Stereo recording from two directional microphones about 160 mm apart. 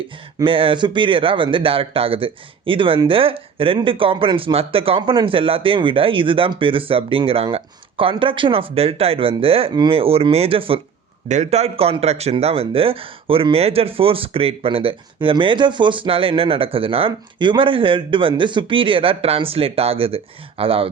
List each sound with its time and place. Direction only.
0.4 s speech: 35° right (ahead or behind)